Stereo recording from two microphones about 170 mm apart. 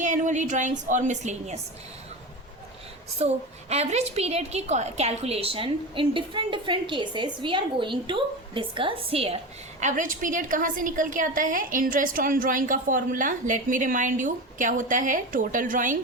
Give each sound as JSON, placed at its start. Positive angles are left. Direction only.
{"t": 0.0, "sound": "a woman's voice", "side_deg": -45}
{"t": 3.2, "sound": "a woman's voice", "side_deg": -40}
{"t": 9.8, "sound": "a woman's voice", "side_deg": -50}